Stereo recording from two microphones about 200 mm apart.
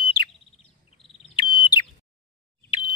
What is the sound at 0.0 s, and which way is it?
Chirp, 25° left (ahead or behind).